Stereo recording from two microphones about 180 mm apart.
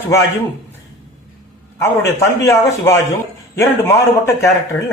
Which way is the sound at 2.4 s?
15° left (ahead or behind).